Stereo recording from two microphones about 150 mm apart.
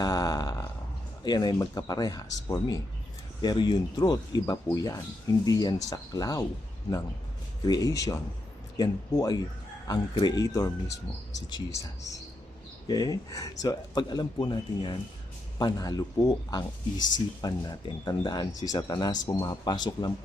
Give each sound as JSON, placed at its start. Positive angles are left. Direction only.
{"t": 0.0, "sound": "a sound", "side_deg": 25}
{"t": 1.2, "sound": "speech", "side_deg": 30}
{"t": 7.6, "sound": "speech", "side_deg": 25}